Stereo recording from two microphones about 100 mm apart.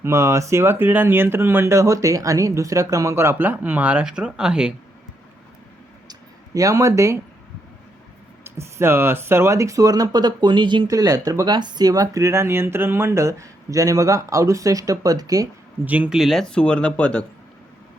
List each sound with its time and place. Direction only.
0.0 s speech: 30° right (ahead or behind); by 4.7 s 10° right (ahead or behind)
6.1 s a sound: 35° right (ahead or behind)
8.4 s speech: 25° right (ahead or behind); by 10.8 s 50° right (ahead or behind)
10.8 s speech: 40° right (ahead or behind)
11.4 s speech: 45° right (ahead or behind)
15.8 s speech: 15° right (ahead or behind)
16.1 s speech: centre (ahead or behind)